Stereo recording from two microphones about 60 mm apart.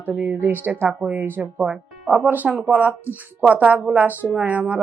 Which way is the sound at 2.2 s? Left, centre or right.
Right.